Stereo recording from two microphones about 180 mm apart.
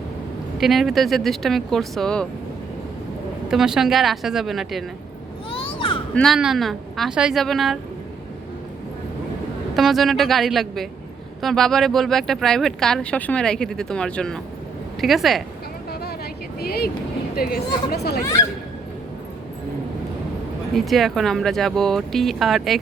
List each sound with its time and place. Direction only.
0.6 s speech: centre (ahead or behind)
3.5 s speech: centre (ahead or behind)
5.5 s children playing: 30° left (ahead or behind)
6.1 s speech: centre (ahead or behind)
9.7 s speech: centre (ahead or behind)
16.6 s speech: 60° left (ahead or behind)
18.2 s speech: 15° left (ahead or behind)
20.7 s speech: centre (ahead or behind)